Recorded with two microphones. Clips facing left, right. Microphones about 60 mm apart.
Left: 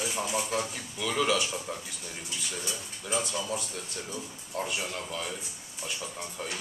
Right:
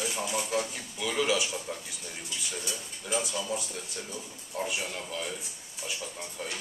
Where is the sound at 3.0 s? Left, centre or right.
Centre.